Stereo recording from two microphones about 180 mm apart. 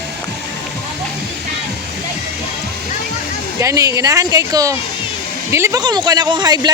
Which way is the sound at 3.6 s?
15° right (ahead or behind).